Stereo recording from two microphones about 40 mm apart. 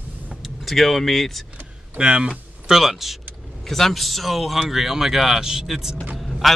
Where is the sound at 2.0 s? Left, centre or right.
Right.